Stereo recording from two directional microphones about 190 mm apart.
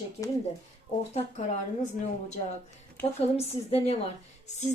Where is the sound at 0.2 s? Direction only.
30° left (ahead or behind).